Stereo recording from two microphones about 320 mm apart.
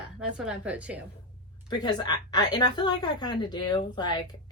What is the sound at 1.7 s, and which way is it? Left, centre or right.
A woman's voice, centre.